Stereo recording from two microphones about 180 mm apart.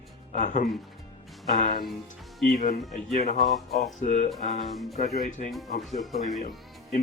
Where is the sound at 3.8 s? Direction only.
40° left (ahead or behind).